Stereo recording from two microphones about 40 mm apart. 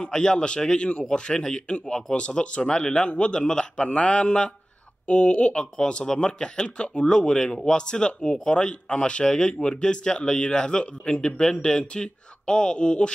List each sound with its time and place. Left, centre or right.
0.0 s speech: centre
2.1 s speech: left